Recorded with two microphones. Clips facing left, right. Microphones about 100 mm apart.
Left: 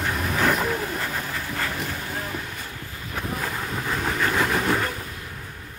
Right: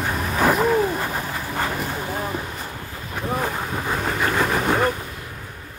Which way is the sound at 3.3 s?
20° right (ahead or behind).